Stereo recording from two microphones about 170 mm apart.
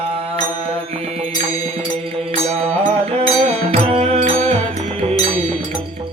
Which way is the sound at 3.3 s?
35° right (ahead or behind).